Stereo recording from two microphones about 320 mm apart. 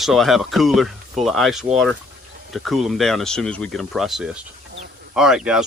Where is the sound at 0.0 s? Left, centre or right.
Centre.